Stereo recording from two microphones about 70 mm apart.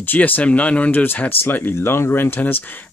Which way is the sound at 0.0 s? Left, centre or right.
Left.